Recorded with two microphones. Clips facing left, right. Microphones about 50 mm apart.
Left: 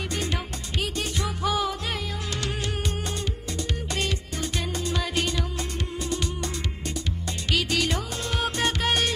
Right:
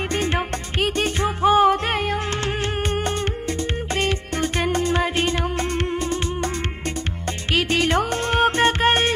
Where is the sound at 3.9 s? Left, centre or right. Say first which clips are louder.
Right 8 dB; right.